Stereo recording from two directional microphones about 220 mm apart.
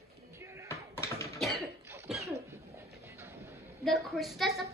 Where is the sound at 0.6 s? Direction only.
10° left (ahead or behind).